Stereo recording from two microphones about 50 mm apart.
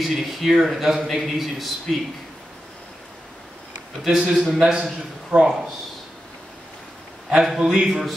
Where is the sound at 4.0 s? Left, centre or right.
Centre.